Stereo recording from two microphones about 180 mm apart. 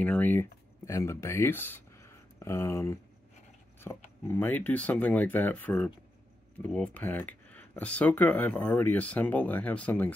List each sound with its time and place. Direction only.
0.0 s speech: 10° left (ahead or behind)